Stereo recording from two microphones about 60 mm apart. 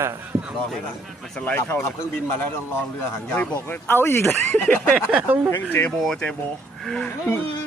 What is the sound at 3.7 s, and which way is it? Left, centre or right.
Speech, left.